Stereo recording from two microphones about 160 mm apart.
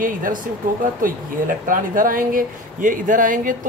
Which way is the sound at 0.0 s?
55° right (ahead or behind).